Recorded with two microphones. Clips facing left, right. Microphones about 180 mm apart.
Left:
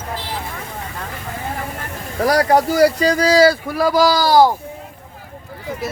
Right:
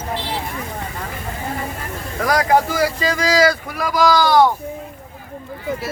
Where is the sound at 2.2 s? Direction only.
35° left (ahead or behind).